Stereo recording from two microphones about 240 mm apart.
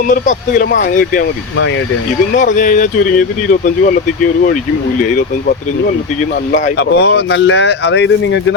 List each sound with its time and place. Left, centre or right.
0.1 s speech: left
2.6 s speech: left
6.7 s speech: left